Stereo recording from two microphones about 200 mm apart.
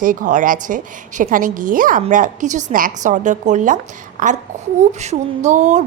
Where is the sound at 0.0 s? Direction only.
40° right (ahead or behind).